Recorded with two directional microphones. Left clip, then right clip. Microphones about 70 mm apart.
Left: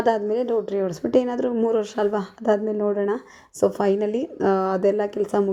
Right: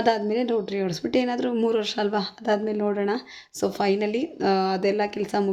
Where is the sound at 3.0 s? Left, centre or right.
Left.